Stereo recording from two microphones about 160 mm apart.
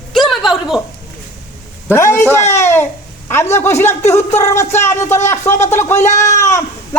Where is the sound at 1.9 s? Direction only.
15° left (ahead or behind).